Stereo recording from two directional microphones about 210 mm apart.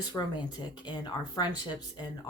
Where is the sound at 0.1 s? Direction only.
20° left (ahead or behind).